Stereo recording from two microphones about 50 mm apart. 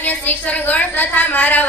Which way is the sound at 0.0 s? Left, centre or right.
Left.